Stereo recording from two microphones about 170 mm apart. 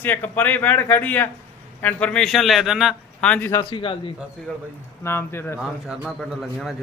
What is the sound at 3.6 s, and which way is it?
Speech, 30° left (ahead or behind).